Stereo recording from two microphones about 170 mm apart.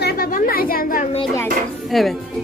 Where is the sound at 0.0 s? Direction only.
55° left (ahead or behind).